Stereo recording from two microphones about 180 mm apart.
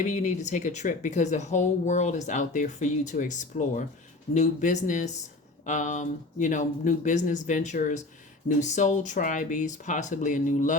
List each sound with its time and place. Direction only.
0.0 s speech: 40° left (ahead or behind)